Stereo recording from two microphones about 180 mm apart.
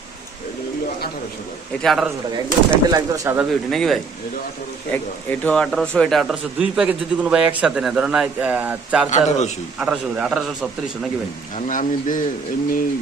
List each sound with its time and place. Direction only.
1.8 s a man's voice: centre (ahead or behind)
2.3 s speech: 15° right (ahead or behind)
3.7 s a man's voice: centre (ahead or behind)
9.0 s speech: 40° left (ahead or behind)
9.7 s a man's voice: 5° right (ahead or behind)
11.5 s speech: 45° left (ahead or behind)